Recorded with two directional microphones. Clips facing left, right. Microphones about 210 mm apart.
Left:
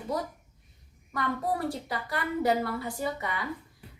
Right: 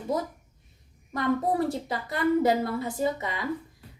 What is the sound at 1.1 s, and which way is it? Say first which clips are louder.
A woman's voice: right 5 dB; 25° right (ahead or behind).